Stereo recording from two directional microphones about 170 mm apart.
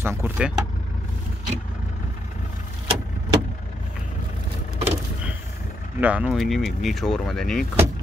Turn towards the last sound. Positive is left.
turn(degrees=0)  # may be behind; listen again after turning